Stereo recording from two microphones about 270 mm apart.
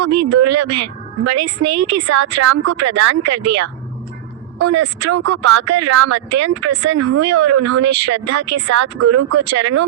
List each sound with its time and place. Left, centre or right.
0.0 s speech: right